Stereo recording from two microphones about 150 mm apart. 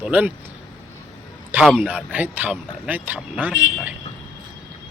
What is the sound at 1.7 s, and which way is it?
Speech, 10° right (ahead or behind).